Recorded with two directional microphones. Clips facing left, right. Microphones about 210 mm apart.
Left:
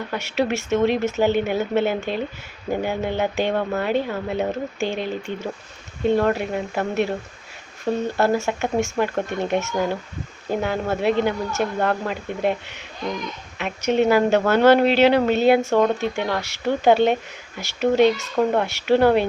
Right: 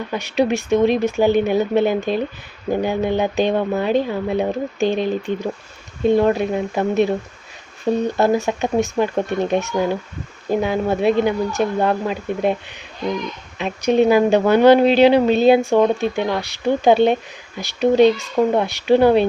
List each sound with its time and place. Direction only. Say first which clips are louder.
0.1 s speech: right 4 dB; 15° right (ahead or behind)